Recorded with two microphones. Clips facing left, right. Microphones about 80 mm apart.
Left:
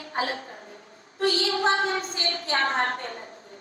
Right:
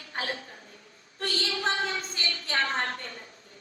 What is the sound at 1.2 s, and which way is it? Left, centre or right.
Music, left.